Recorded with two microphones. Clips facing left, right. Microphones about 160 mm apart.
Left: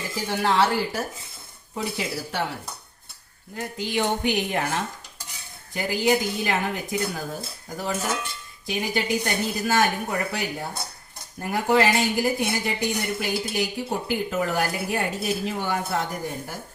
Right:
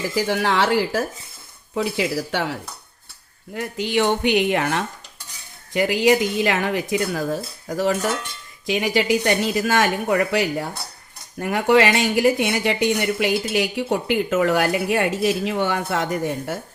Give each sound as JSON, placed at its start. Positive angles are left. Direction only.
{"t": 0.2, "sound": "speech", "side_deg": -90}
{"t": 3.5, "sound": "speech", "side_deg": -80}
{"t": 5.7, "sound": "speech", "side_deg": -90}
{"t": 11.3, "sound": "speech", "side_deg": -80}